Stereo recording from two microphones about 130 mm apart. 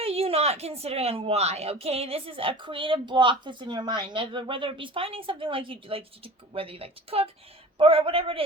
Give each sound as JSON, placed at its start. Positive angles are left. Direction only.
{"t": 0.0, "sound": "a woman's voice", "side_deg": -50}